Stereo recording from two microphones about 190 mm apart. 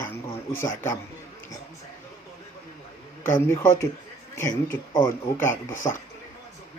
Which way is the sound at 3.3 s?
10° left (ahead or behind).